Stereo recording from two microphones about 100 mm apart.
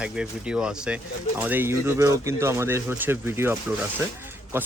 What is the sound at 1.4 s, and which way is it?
Speech, 20° right (ahead or behind).